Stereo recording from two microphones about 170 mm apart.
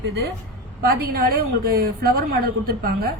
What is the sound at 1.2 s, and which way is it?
A woman's voice, 60° right (ahead or behind).